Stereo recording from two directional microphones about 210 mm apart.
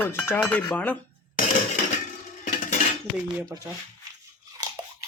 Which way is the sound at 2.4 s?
35° left (ahead or behind).